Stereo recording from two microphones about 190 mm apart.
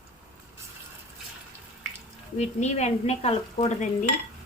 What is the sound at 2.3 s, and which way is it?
Speech, 35° left (ahead or behind).